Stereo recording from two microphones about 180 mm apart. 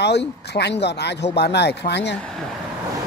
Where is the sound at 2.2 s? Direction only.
5° left (ahead or behind).